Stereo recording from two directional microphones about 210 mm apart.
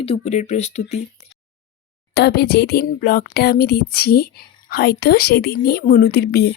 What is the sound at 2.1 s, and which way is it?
A woman's voice, 50° left (ahead or behind).